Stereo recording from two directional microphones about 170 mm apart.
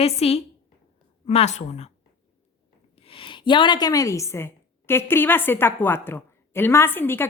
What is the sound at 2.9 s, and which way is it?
A woman's voice, 30° left (ahead or behind).